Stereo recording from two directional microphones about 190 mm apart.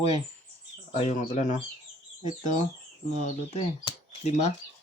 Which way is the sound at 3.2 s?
35° left (ahead or behind).